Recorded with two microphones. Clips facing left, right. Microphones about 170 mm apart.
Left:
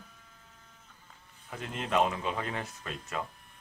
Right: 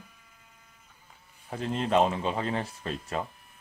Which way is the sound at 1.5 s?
30° right (ahead or behind).